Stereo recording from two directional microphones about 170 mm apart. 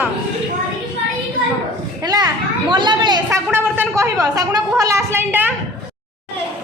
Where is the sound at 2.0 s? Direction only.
20° right (ahead or behind).